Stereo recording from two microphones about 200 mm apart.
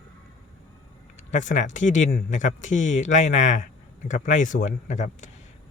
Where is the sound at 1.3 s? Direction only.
40° left (ahead or behind).